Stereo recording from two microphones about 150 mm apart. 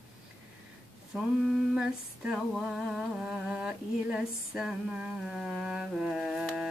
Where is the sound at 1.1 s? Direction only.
5° right (ahead or behind).